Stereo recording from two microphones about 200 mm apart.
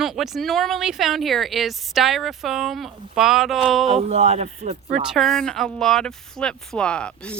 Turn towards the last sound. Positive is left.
turn(degrees=5)  # may be behind; listen again after turning